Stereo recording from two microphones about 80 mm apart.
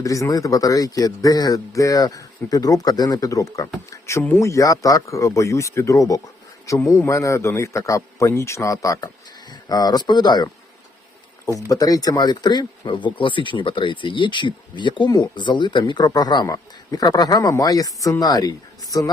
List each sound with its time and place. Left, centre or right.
0.0 s a man's voice: left
11.7 s speech: left